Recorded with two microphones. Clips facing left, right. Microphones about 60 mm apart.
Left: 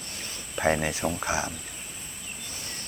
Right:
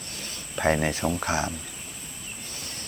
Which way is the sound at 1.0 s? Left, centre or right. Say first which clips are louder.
Right 2 dB; centre.